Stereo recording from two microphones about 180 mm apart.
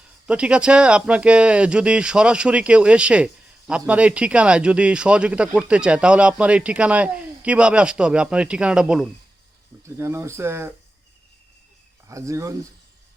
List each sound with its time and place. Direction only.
0.3 s speech: 5° right (ahead or behind)
9.8 s speech: 15° right (ahead or behind)
12.0 s speech: 15° right (ahead or behind)